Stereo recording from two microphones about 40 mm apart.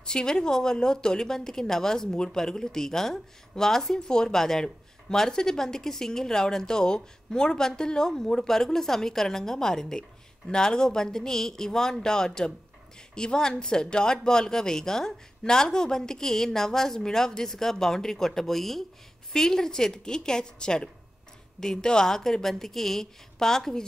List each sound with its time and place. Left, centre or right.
0.0 s speech: centre